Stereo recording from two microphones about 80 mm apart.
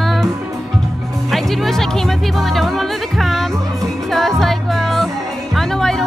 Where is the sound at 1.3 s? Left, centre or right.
Centre.